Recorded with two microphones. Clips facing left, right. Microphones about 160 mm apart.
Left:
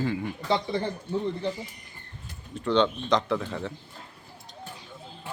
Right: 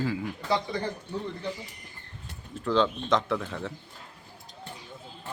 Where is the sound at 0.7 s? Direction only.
30° left (ahead or behind).